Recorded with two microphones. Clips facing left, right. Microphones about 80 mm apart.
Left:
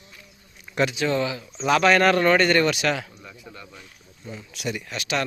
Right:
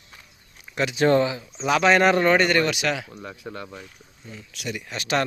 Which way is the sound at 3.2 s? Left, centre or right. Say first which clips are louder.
Right 7 dB; right.